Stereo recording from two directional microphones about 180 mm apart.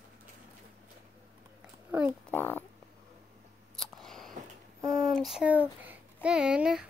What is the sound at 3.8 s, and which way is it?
Scissors, centre (ahead or behind).